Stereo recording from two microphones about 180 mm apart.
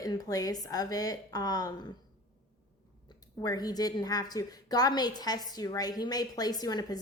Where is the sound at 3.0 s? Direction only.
20° left (ahead or behind).